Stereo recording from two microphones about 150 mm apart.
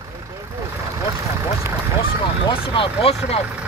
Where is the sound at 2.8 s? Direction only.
40° left (ahead or behind).